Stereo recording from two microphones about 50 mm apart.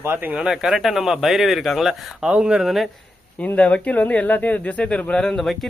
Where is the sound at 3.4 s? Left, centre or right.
Left.